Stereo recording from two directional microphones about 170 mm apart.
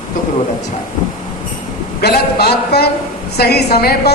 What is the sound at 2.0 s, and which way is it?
A man's voice, 70° left (ahead or behind).